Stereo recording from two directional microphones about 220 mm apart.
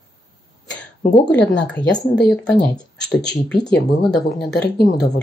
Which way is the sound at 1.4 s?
55° left (ahead or behind).